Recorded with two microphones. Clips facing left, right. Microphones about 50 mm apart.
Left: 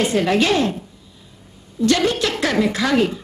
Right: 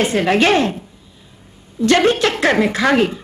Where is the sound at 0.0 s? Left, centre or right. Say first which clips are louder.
Right 3 dB; right.